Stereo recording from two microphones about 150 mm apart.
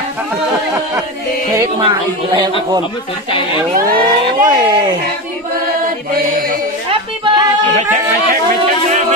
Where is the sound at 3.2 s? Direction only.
35° left (ahead or behind).